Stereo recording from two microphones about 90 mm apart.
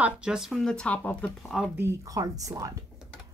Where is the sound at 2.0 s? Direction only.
40° right (ahead or behind).